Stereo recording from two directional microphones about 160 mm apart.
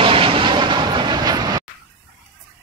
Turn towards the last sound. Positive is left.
turn(degrees=-25)  # may be behind; listen again after turning